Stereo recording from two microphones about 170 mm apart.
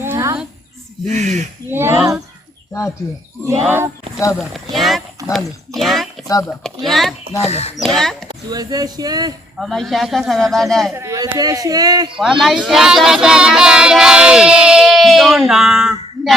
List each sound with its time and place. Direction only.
0.0 s a sound: 15° right (ahead or behind)
1.0 s speech: 45° right (ahead or behind)
1.7 s speech: 15° right (ahead or behind)
3.7 s speech: 15° right (ahead or behind)
4.4 s a man's voice: centre (ahead or behind)
7.4 s speech: 40° left (ahead or behind)
8.3 s speech: 25° right (ahead or behind)
9.6 s a man's voice: centre (ahead or behind)
10.9 s speech: 20° right (ahead or behind)
12.1 s child singing: 5° right (ahead or behind)